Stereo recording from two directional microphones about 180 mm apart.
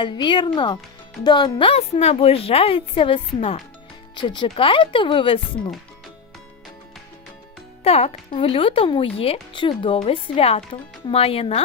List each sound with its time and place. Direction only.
0.0 s speech: 25° left (ahead or behind)
7.9 s speech: 35° left (ahead or behind)